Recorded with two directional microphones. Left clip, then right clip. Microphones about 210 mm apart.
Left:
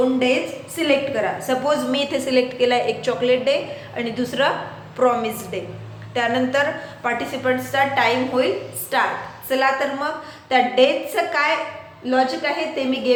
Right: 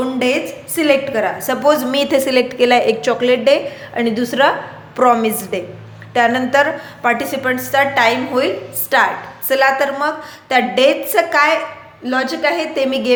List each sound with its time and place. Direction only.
0.8 s a woman's voice: 50° right (ahead or behind)